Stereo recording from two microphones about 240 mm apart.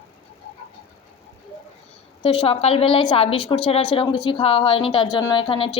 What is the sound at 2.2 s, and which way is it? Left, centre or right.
A woman's voice, left.